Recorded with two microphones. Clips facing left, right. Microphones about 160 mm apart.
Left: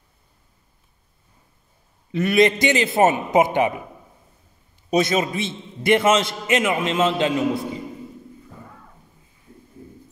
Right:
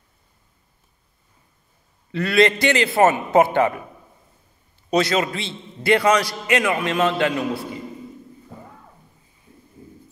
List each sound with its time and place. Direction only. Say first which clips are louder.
2.1 s a man's voice: left 1 dB; 20° left (ahead or behind)
4.9 s a man's voice: even; 15° left (ahead or behind)